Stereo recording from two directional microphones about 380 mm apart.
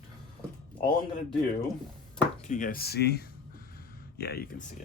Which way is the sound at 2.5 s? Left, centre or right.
Left.